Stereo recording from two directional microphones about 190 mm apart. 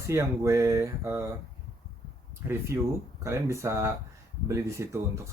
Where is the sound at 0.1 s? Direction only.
15° right (ahead or behind).